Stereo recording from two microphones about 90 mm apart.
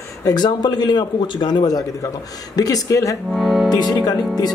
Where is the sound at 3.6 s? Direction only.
50° left (ahead or behind).